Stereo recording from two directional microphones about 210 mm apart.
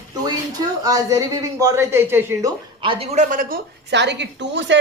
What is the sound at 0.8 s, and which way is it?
Speech, 15° right (ahead or behind).